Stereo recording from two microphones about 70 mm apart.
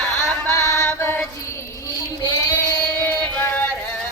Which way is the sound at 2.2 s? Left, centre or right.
Left.